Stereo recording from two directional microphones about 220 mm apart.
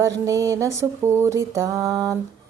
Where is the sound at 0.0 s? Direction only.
15° right (ahead or behind).